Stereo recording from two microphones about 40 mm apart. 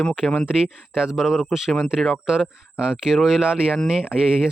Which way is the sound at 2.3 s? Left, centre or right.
Right.